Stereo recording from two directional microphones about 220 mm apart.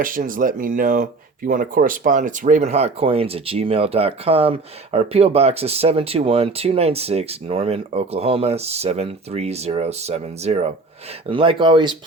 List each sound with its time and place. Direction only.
0.0 s speech: 40° right (ahead or behind); by 11.9 s 20° right (ahead or behind)